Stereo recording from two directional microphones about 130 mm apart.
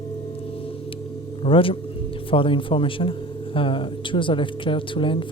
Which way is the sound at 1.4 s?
45° left (ahead or behind).